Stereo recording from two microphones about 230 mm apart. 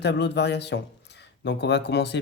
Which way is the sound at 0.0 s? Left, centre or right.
Left.